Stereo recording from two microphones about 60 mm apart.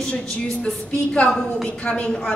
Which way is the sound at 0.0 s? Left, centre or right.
Centre.